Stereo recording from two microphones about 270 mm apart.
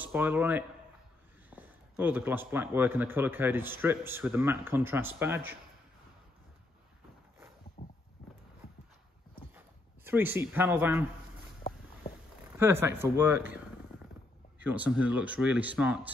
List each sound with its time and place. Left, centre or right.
0.0 s a man's voice: centre
7.8 s boat: left
10.0 s a man's voice: centre
12.5 s a man's voice: centre
14.6 s speech: centre